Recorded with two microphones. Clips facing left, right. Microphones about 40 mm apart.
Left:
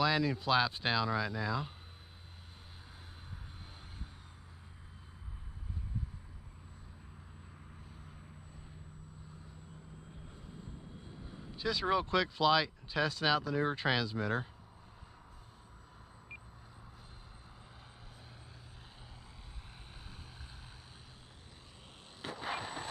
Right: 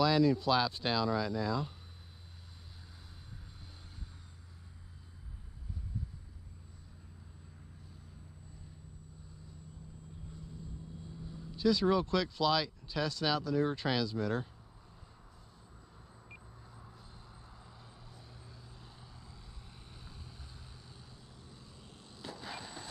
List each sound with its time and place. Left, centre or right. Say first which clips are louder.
0.0 s speech: right 3 dB; left
11.2 s speech: right 7 dB; left
22.2 s vehicle: left 5 dB; left